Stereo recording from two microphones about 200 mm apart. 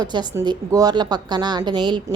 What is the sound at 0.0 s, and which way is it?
A woman's voice, 20° right (ahead or behind).